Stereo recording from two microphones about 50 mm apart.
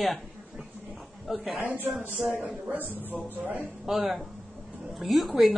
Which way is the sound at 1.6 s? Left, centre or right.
Right.